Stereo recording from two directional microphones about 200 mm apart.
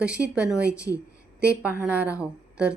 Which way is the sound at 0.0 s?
5° right (ahead or behind).